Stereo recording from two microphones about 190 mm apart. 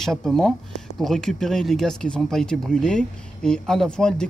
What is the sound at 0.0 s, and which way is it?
Speech, centre (ahead or behind).